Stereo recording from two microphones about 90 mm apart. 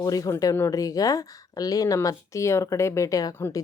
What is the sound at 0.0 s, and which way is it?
A woman's voice, 40° left (ahead or behind).